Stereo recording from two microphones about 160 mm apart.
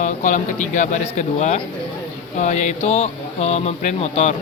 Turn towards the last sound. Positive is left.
turn(degrees=45)  # may be behind; listen again after turning